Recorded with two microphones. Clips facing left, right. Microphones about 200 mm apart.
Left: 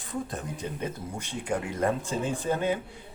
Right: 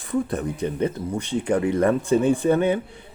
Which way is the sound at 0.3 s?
65° right (ahead or behind).